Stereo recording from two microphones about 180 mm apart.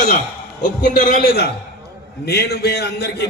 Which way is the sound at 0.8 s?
45° left (ahead or behind).